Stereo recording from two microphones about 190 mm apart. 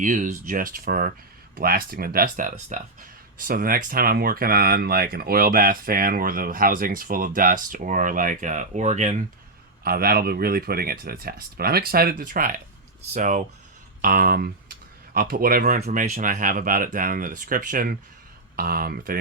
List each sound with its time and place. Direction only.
0.0 s speech: 40° right (ahead or behind)
9.8 s speech: 50° right (ahead or behind)